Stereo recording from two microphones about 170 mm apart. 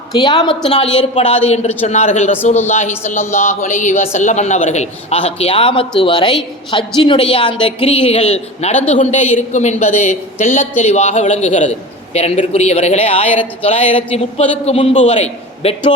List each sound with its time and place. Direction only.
0.2 s a woman's voice: 25° left (ahead or behind)